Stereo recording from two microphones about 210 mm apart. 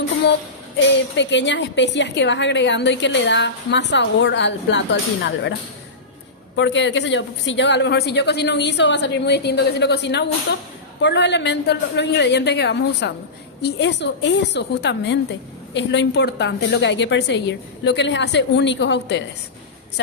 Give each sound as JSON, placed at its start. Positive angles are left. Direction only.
{"t": 0.9, "sound": "a woman's voice", "side_deg": 60}
{"t": 6.6, "sound": "a woman's voice", "side_deg": 60}